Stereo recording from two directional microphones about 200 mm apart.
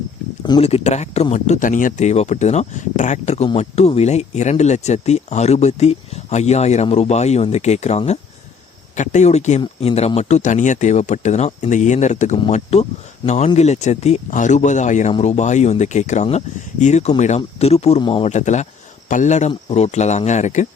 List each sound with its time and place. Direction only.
0.4 s speech: 25° left (ahead or behind)